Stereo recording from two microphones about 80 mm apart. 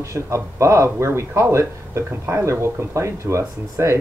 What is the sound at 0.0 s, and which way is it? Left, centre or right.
Speech, right.